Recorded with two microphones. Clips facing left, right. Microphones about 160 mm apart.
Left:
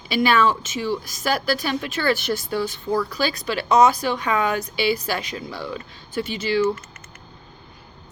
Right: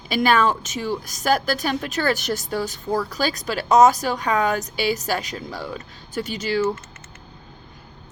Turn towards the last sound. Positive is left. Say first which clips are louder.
# left 1 dB
turn(degrees=-45)  # may be behind; listen again after turning